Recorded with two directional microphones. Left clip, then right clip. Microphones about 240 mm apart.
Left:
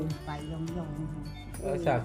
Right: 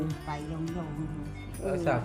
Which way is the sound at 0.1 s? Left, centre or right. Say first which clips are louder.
Right 2 dB; centre.